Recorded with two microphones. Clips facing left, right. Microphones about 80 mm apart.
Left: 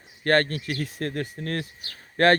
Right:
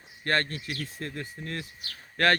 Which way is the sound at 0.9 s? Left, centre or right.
Left.